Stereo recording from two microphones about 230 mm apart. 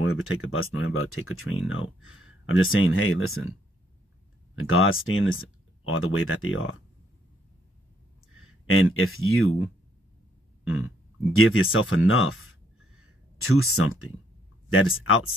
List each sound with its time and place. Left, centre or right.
0.0 s speech: left
4.6 s speech: left
8.6 s speech: left
11.3 s speech: left